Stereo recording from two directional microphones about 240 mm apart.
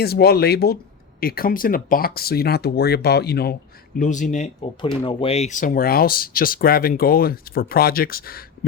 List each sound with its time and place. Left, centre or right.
0.0 s speech: left